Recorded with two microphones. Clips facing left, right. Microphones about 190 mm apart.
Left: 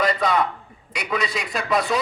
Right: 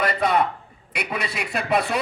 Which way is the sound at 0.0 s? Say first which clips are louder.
Even; 60° right (ahead or behind).